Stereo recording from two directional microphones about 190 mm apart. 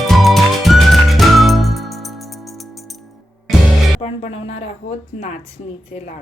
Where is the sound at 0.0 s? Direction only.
Centre (ahead or behind).